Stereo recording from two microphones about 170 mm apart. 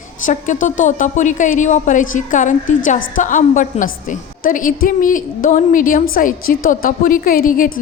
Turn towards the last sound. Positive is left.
turn(degrees=55)  # may be behind; listen again after turning